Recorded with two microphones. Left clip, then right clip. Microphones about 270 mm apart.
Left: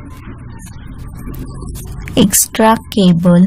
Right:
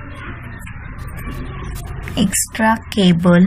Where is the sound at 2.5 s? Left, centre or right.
Left.